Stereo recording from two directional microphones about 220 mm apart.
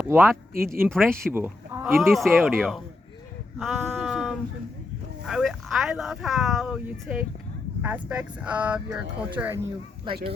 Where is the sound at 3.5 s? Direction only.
Centre (ahead or behind).